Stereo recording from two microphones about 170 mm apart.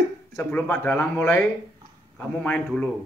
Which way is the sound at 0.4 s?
10° left (ahead or behind).